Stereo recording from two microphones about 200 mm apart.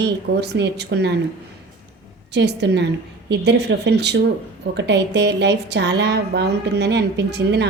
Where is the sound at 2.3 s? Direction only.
60° right (ahead or behind).